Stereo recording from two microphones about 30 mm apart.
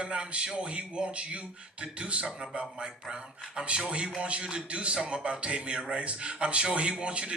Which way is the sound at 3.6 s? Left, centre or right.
Right.